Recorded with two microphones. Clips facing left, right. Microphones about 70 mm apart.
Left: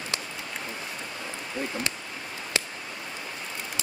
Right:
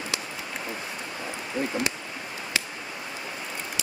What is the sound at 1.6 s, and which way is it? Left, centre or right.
Speech, centre.